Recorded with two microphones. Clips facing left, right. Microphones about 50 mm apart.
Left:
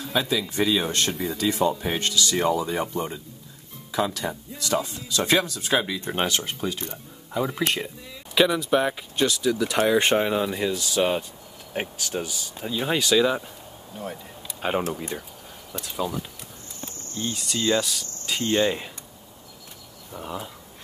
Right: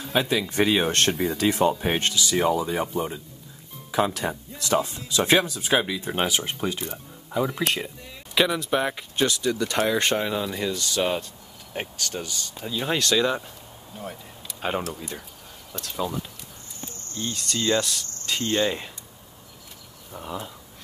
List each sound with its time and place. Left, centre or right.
0.1 s speech: right
2.1 s speech: centre
3.9 s speech: right; by 6.4 s centre
6.4 s speech: right
6.8 s speech: centre
14.8 s speech: left
15.7 s speech: centre
20.1 s speech: centre